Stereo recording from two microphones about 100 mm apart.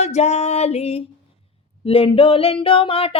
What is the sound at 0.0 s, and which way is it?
Music, 90° left.